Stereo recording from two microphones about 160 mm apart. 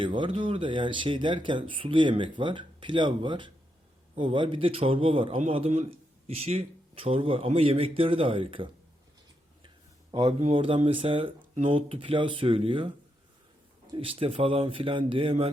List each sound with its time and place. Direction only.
0.0 s speech: 30° right (ahead or behind)
10.1 s speech: 30° right (ahead or behind)
13.9 s speech: 35° right (ahead or behind)